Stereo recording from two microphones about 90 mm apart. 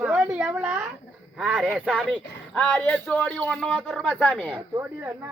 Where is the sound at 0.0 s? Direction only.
15° right (ahead or behind).